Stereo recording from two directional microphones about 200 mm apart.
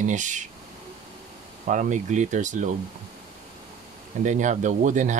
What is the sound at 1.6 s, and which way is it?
Speech, 40° right (ahead or behind).